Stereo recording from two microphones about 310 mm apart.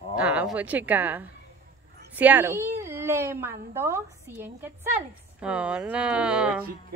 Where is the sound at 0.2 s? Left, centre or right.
Centre.